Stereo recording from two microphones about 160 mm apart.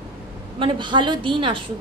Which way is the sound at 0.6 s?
30° right (ahead or behind).